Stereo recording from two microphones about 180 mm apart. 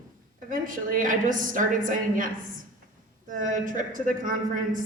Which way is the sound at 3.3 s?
45° right (ahead or behind).